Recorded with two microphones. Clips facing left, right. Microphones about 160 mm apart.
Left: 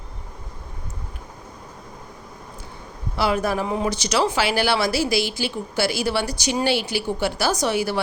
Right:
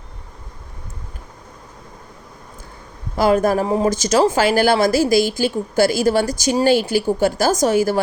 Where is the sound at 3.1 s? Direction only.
45° right (ahead or behind).